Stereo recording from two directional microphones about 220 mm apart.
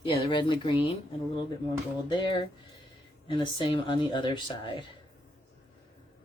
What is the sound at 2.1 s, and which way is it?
Speech, 20° left (ahead or behind).